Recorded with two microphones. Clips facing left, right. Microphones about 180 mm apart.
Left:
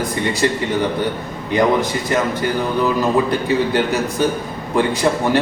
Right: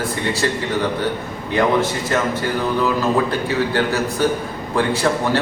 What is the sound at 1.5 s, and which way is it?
A man's voice, 15° left (ahead or behind).